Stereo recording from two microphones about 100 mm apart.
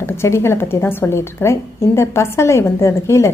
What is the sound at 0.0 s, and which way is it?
A woman's voice, 25° left (ahead or behind).